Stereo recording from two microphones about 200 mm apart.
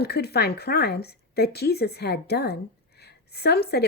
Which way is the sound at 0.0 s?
55° left (ahead or behind).